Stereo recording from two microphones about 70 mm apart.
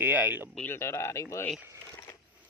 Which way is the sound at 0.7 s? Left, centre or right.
Left.